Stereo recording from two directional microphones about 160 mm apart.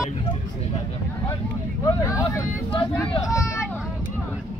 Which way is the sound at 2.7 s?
35° left (ahead or behind).